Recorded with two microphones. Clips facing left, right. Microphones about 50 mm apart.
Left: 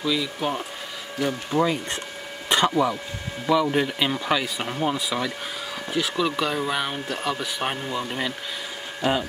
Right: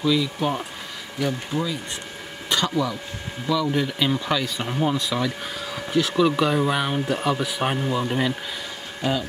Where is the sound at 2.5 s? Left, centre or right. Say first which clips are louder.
Left 3 dB; left; by 8.3 s centre.